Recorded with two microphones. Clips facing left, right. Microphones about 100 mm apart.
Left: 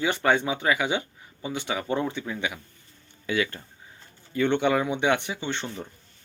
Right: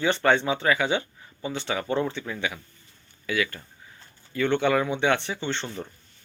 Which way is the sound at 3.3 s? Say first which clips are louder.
Left 1 dB; 25° left (ahead or behind).